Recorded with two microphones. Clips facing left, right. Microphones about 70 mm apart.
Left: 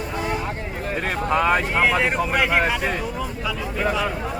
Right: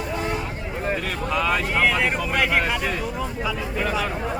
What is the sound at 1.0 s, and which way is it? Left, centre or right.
Vehicle, left.